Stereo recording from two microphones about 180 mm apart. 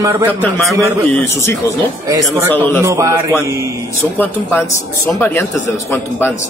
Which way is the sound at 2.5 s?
10° left (ahead or behind).